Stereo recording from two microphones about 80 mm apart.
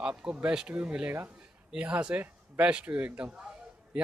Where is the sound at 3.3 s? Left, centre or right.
Centre.